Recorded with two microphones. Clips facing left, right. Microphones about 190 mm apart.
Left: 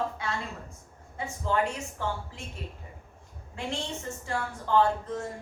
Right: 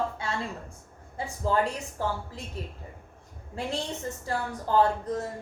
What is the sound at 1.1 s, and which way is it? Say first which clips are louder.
A woman's voice: right 2 dB; 35° right (ahead or behind).